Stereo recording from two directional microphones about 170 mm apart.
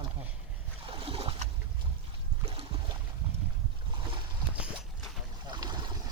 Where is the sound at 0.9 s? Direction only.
30° right (ahead or behind).